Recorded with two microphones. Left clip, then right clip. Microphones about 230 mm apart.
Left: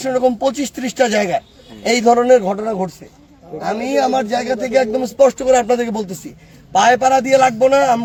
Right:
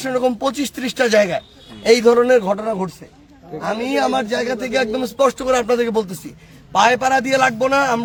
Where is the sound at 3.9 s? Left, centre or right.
Centre.